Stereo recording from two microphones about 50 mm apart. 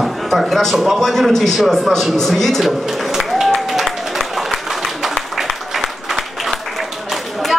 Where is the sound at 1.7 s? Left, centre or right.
Centre.